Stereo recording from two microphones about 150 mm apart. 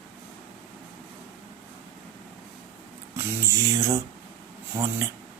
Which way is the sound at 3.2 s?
20° right (ahead or behind).